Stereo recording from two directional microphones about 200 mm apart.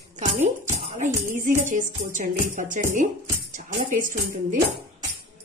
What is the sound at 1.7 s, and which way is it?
Speech, 40° right (ahead or behind).